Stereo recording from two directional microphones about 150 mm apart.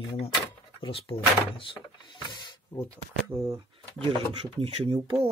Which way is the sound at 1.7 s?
30° left (ahead or behind).